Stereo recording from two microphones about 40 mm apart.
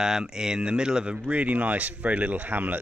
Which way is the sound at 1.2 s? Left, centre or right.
Right.